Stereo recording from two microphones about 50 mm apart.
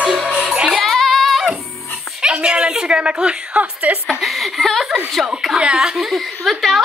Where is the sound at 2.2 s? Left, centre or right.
Centre.